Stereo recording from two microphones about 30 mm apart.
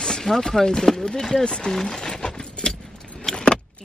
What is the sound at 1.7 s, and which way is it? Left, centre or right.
Speech, centre.